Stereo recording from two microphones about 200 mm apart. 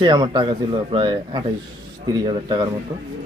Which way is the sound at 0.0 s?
20° right (ahead or behind).